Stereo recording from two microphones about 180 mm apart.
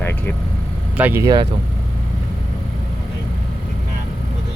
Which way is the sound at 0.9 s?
10° right (ahead or behind).